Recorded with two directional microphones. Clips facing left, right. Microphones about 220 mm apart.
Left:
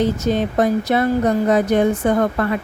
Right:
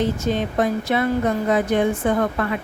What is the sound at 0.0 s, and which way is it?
Speech, 40° left (ahead or behind).